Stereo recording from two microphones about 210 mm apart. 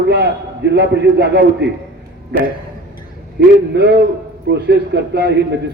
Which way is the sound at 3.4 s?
50° right (ahead or behind).